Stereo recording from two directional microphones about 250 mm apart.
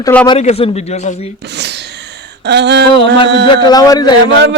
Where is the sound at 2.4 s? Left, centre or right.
Right.